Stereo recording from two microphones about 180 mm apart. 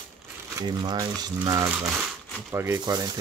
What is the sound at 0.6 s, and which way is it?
Speech, 20° right (ahead or behind).